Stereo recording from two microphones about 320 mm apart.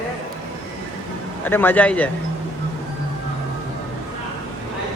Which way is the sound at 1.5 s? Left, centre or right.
Centre.